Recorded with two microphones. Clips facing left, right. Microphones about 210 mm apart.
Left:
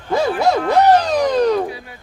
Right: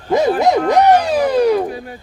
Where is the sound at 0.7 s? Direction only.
15° right (ahead or behind).